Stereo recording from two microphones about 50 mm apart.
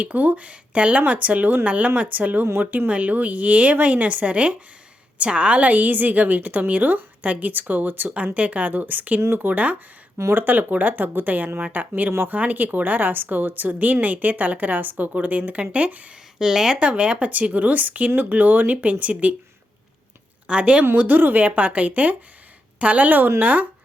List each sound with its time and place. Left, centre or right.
0.0 s speech: right
8.1 s speech: right
16.4 s speech: centre; by 19.3 s right
20.5 s speech: right
20.9 s speech: right